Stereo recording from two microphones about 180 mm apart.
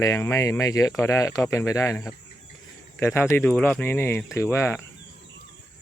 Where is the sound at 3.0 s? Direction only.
15° left (ahead or behind).